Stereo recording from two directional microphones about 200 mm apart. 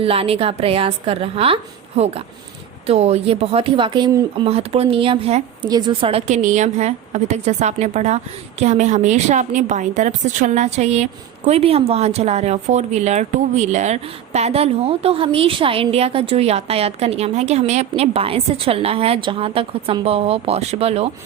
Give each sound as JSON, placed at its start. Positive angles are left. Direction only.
{"t": 0.0, "sound": "a woman's voice", "side_deg": -30}